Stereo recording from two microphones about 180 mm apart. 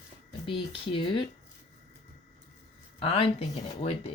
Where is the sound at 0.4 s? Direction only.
30° left (ahead or behind).